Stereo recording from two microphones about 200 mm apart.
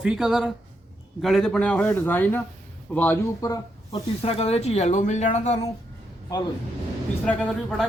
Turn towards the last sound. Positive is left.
turn(degrees=5)  # may be behind; listen again after turning